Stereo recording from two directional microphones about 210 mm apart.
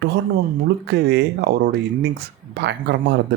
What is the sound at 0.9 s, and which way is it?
Speech, 50° right (ahead or behind).